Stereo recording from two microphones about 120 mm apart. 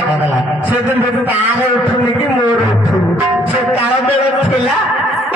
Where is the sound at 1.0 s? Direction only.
15° right (ahead or behind).